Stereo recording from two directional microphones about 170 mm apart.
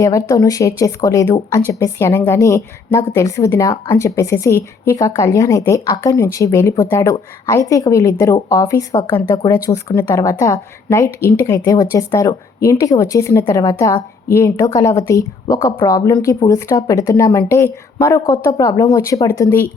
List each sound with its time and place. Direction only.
0.0 s speech: 20° left (ahead or behind)